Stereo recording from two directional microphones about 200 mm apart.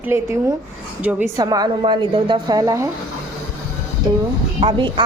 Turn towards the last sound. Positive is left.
turn(degrees=-25)  # may be behind; listen again after turning